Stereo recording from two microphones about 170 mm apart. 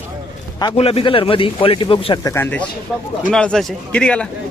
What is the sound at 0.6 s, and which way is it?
A man's voice, 35° left (ahead or behind).